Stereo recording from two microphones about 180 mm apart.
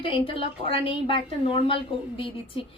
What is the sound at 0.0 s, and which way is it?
A woman's voice, 30° left (ahead or behind).